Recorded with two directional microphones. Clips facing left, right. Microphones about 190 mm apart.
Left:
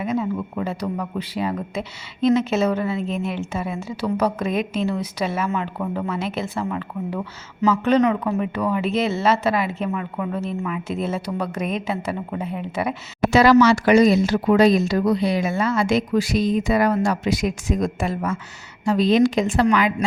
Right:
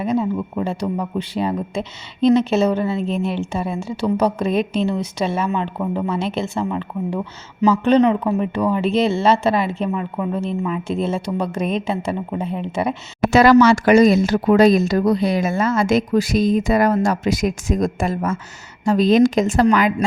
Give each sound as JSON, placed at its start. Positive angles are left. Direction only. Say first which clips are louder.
{"t": 0.0, "sound": "a sound", "louder": "right 4 dB", "side_deg": -30}
{"t": 0.6, "sound": "speech", "louder": "right 4 dB", "side_deg": -30}
{"t": 13.3, "sound": "speech", "louder": "right 2 dB", "side_deg": -50}